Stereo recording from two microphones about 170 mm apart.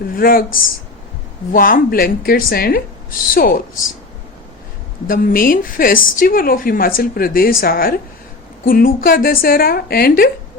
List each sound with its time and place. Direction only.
0.1 s a woman's voice: 60° left (ahead or behind)
5.0 s a woman's voice: 55° left (ahead or behind)